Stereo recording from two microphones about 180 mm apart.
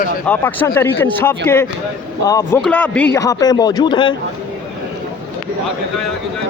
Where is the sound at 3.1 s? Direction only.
20° left (ahead or behind).